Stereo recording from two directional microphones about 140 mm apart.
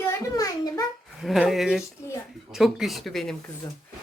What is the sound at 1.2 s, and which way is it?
Speech, centre (ahead or behind).